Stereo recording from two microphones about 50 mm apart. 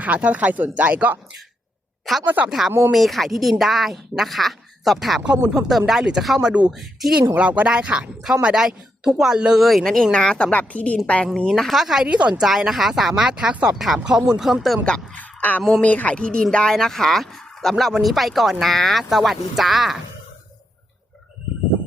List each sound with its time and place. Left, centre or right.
0.0 s speech: right
2.1 s a woman's voice: centre
6.4 s speech: right
6.7 s a woman's voice: centre
7.3 s speech: right
8.5 s speech: centre
9.6 s a woman's voice: centre; by 11.3 s left
11.3 s speech: centre
11.7 s speech: centre
12.0 s speech: right
12.3 s speech: centre
13.7 s a woman's voice: centre
15.1 s a woman's voice: left
16.1 s a woman's voice: centre